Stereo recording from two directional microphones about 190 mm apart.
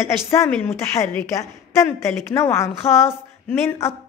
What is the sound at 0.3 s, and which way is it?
A woman's voice, 10° left (ahead or behind).